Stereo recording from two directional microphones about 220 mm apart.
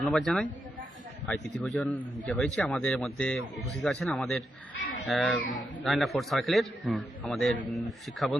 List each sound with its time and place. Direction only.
0.0 s a man's voice: centre (ahead or behind)